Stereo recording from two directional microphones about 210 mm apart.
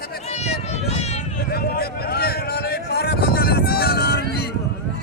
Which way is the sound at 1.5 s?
45° left (ahead or behind).